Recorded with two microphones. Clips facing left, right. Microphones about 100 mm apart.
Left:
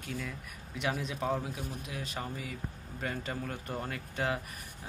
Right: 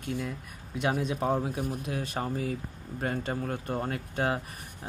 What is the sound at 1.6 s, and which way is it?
Speech, 50° right (ahead or behind).